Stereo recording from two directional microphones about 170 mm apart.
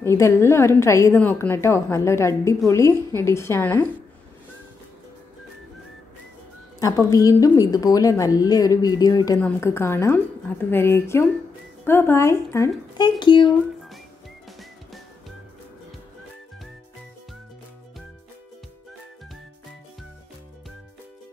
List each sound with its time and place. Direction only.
0.0 s a woman's voice: 15° left (ahead or behind)
7.1 s a woman's voice: 20° left (ahead or behind)
14.6 s music: centre (ahead or behind)